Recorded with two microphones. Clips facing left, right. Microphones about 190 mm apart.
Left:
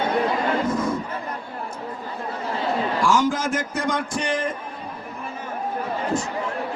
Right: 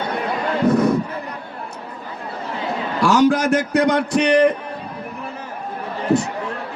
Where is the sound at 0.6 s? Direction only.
65° right (ahead or behind).